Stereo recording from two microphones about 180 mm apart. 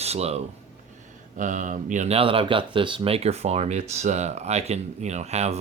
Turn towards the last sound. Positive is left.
turn(degrees=-40)  # may be behind; listen again after turning